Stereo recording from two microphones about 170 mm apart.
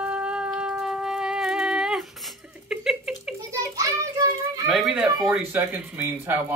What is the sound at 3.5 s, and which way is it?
Children playing, 20° right (ahead or behind).